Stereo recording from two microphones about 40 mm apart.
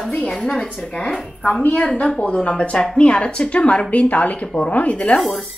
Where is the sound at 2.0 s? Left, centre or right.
Left.